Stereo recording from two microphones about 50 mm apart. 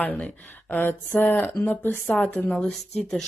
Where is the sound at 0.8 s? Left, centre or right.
Left.